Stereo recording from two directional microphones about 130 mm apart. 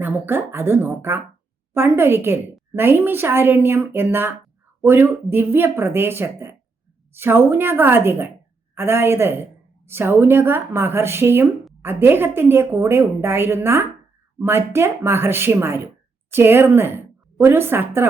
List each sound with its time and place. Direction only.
0.0 s a woman's voice: 15° right (ahead or behind)